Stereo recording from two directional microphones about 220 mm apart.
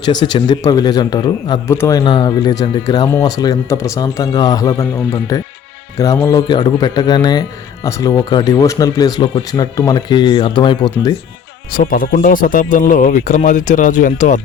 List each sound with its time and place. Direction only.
0.0 s a man's voice: 20° left (ahead or behind)
11.7 s speech: 40° left (ahead or behind)